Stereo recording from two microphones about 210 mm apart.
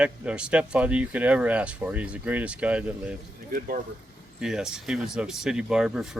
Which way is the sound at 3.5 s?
45° right (ahead or behind).